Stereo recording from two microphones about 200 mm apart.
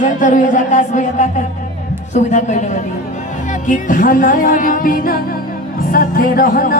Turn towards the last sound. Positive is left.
turn(degrees=45)  # may be behind; listen again after turning